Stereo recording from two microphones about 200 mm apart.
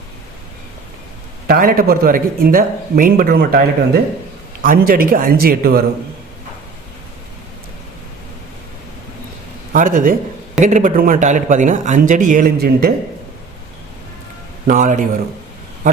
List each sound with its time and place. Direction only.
1.5 s speech: 45° right (ahead or behind)
9.7 s speech: 40° right (ahead or behind)
14.7 s speech: 40° right (ahead or behind)